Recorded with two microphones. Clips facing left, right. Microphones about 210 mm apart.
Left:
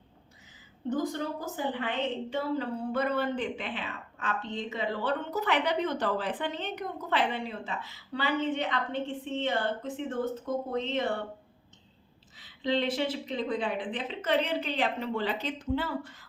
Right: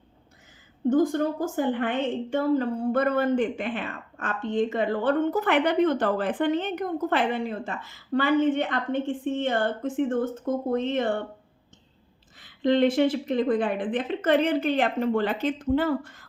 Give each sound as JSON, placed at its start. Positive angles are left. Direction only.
{"t": 0.9, "sound": "a woman's voice", "side_deg": -50}
{"t": 12.4, "sound": "a woman's voice", "side_deg": -50}